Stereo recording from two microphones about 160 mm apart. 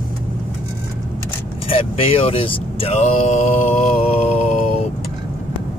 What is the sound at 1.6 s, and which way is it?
Speech, 35° left (ahead or behind).